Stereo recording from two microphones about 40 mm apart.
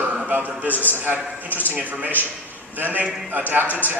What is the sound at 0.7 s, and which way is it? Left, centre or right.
Speech, left.